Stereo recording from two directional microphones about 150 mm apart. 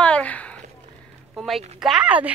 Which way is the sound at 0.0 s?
10° left (ahead or behind).